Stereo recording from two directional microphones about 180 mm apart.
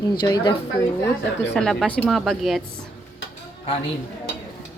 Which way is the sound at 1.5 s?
Centre (ahead or behind).